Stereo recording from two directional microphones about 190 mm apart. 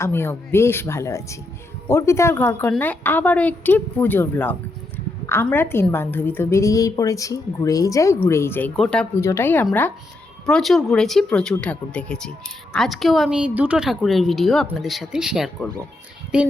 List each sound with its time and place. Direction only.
0.0 s a woman's voice: 10° left (ahead or behind); by 16.5 s 5° right (ahead or behind)